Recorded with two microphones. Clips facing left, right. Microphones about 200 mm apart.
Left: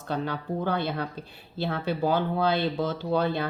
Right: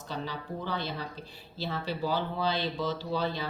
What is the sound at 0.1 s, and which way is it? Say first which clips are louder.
Speech: left 7 dB; 55° left (ahead or behind).